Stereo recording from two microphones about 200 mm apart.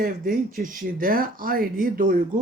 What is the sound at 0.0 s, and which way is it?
Speech, 45° right (ahead or behind).